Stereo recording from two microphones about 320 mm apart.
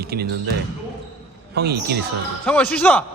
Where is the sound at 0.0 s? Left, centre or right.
Right.